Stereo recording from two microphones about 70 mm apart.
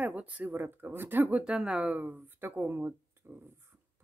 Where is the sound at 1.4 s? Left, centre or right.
Centre; by 2.9 s right.